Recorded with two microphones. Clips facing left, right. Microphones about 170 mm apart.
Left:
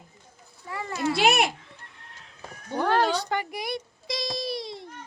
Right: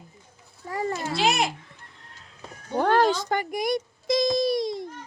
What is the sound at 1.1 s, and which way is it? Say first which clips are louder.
Babbling: left 2 dB; 60° left (ahead or behind).